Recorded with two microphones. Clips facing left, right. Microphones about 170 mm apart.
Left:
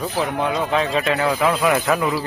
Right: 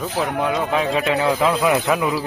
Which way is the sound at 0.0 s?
5° right (ahead or behind).